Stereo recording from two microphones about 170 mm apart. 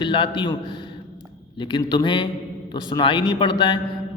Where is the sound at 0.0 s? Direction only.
30° left (ahead or behind).